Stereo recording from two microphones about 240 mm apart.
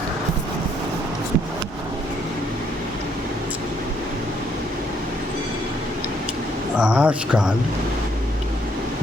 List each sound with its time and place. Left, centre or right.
6.7 s speech: centre